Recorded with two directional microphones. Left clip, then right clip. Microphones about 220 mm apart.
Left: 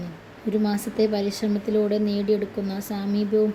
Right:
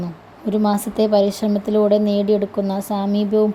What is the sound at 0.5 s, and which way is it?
A woman's voice, 30° right (ahead or behind).